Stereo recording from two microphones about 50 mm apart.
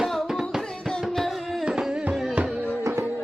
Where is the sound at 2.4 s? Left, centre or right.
Right.